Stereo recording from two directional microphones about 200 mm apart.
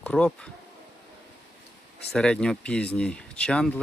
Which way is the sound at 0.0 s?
5° left (ahead or behind).